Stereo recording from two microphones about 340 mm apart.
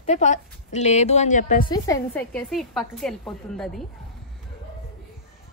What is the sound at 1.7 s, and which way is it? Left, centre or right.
A woman's voice, centre.